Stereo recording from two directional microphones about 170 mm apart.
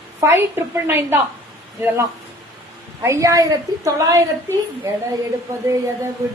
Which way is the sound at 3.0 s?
20° right (ahead or behind).